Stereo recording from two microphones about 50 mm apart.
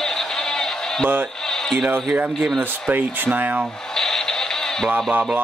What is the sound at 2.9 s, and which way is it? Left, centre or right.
Speech, right.